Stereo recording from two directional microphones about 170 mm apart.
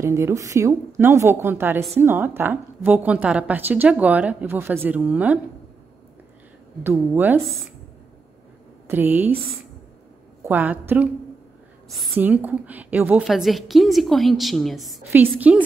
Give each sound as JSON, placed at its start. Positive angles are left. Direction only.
{"t": 0.0, "sound": "a woman's voice", "side_deg": -15}
{"t": 6.8, "sound": "a woman's voice", "side_deg": -10}
{"t": 7.3, "sound": "a woman's voice", "side_deg": 0}
{"t": 8.8, "sound": "a woman's voice", "side_deg": -10}
{"t": 10.4, "sound": "a woman's voice", "side_deg": -10}
{"t": 12.2, "sound": "a woman's voice", "side_deg": -10}
{"t": 15.1, "sound": "a woman's voice", "side_deg": -10}